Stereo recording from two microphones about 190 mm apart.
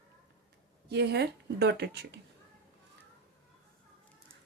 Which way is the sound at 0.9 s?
60° right (ahead or behind).